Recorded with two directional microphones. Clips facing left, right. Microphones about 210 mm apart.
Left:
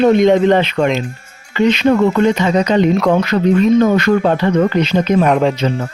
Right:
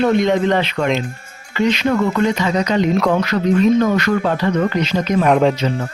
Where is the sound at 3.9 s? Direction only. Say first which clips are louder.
Left 4 dB; 25° left (ahead or behind).